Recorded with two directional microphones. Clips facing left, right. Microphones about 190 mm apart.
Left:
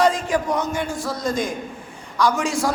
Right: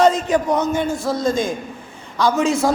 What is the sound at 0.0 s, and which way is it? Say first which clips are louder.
A man's voice: right 4 dB; 20° right (ahead or behind).